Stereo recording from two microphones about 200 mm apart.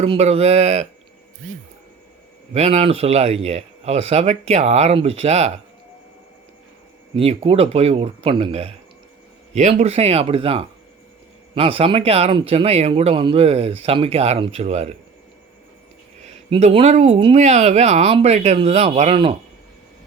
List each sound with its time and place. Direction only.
0.0 s speech: 30° right (ahead or behind)
2.5 s speech: 35° right (ahead or behind)
7.2 s speech: 30° right (ahead or behind)
16.5 s speech: 30° right (ahead or behind)